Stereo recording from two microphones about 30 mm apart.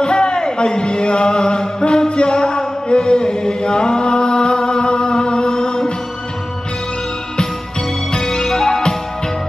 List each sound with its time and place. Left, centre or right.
0.0 s chant: left
8.3 s music: left